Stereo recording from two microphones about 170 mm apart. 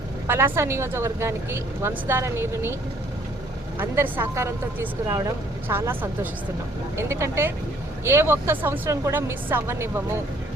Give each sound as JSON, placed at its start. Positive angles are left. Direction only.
{"t": 0.3, "sound": "speech", "side_deg": -15}
{"t": 3.8, "sound": "speech", "side_deg": -10}